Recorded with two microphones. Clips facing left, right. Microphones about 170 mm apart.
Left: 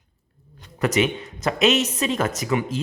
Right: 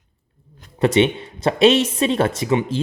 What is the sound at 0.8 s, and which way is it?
Speech, 30° right (ahead or behind).